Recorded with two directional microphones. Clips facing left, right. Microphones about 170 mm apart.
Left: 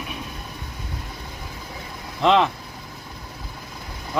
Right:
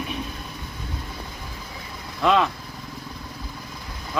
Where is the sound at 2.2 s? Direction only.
25° left (ahead or behind).